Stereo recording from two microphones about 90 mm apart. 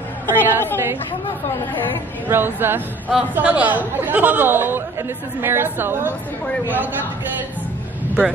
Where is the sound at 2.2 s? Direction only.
25° right (ahead or behind).